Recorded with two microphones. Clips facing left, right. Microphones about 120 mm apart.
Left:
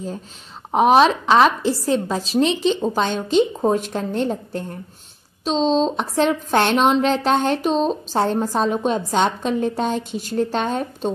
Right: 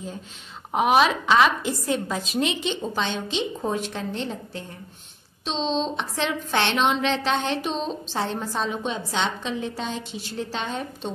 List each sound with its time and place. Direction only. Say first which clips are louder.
0.7 s a woman's voice: left 5 dB; 35° left (ahead or behind)
2.9 s a woman's voice: left 7 dB; 45° left (ahead or behind)
5.4 s a woman's voice: left 7 dB; 40° left (ahead or behind)